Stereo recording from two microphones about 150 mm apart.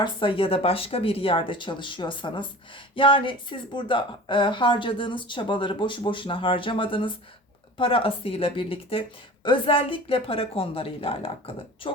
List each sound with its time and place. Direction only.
0.0 s speech: 35° left (ahead or behind)